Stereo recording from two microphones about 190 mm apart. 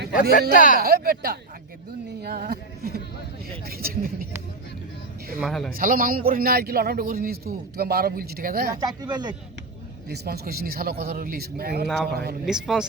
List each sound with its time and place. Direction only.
0.1 s speech: 45° left (ahead or behind)
0.8 s a man's voice: 55° right (ahead or behind)
5.4 s a man's voice: centre (ahead or behind)
5.7 s a man's voice: 50° right (ahead or behind)
8.8 s speech: 20° right (ahead or behind)
10.1 s a man's voice: 55° right (ahead or behind)
12.5 s a man's voice: 5° right (ahead or behind)